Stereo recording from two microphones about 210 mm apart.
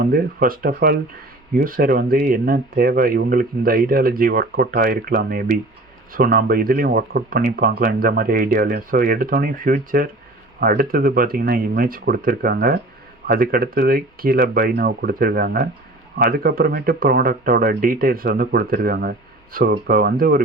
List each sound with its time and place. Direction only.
0.0 s speech: 45° right (ahead or behind)